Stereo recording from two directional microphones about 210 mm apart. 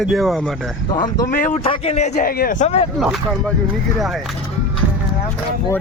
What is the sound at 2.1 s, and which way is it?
Speech, 45° left (ahead or behind).